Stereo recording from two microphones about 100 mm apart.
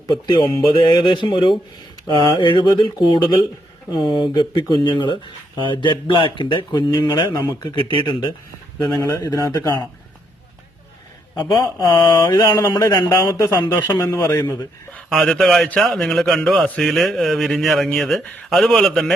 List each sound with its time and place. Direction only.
0.1 s speech: 50° left (ahead or behind)
9.0 s speech: 40° left (ahead or behind)
11.6 s mantra: 30° left (ahead or behind)
12.3 s speech: 40° left (ahead or behind)
13.1 s speech: 35° left (ahead or behind)
13.7 s mantra: 25° left (ahead or behind)
14.0 s speech: 30° left (ahead or behind)
15.1 s speech: 5° left (ahead or behind)